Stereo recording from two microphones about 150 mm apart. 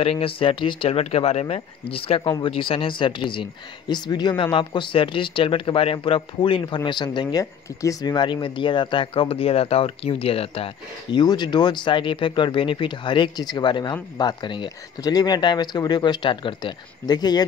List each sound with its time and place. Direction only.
0.0 s speech: 40° left (ahead or behind)
2.2 s speech: 25° left (ahead or behind)
2.5 s speech: 35° left (ahead or behind)